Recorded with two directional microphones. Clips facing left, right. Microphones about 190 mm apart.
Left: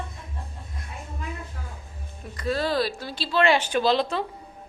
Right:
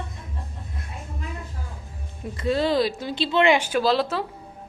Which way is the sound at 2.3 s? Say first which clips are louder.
Right 3 dB; 20° right (ahead or behind).